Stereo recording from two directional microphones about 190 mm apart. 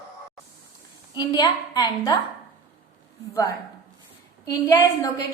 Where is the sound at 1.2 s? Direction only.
20° left (ahead or behind).